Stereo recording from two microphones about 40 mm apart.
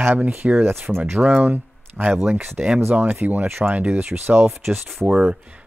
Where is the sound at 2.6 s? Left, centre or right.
Right.